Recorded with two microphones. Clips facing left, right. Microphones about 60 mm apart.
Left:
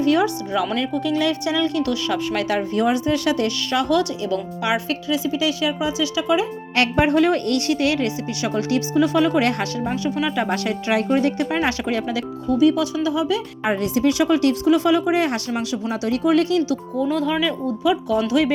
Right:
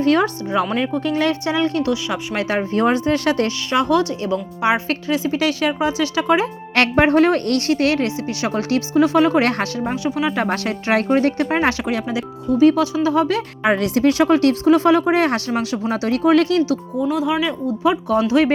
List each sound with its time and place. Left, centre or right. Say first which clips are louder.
0.0 s speech: right 2 dB; right
0.8 s speech: right 2 dB; right
1.9 s speech: even; right
3.7 s a woman's voice: right 3 dB; right
4.9 s speech: right 2 dB; right
9.8 s a woman's voice: right 1 dB; right
10.5 s speech: right 2 dB; right
11.9 s speech: right 1 dB; right
12.6 s speech: right 4 dB; right
13.2 s speech: right 3 dB; right
15.9 s speech: right 3 dB; right
17.0 s speech: right 1 dB; centre
18.2 s a woman's voice: right 3 dB; right